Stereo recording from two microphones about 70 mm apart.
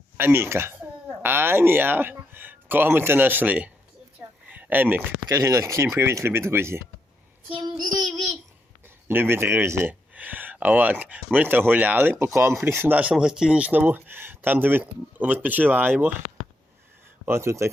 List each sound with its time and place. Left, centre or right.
0.2 s speech: right
4.4 s a sound: right
5.3 s speech: right
9.0 s speech: right
10.2 s speech: right
12.2 s speech: right
12.9 s speech: right
17.2 s speech: right